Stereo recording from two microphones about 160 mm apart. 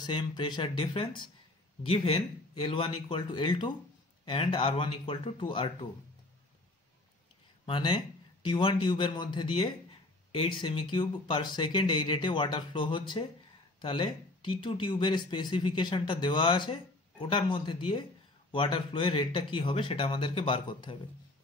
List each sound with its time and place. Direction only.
0.0 s speech: 25° left (ahead or behind)
7.6 s speech: 30° left (ahead or behind)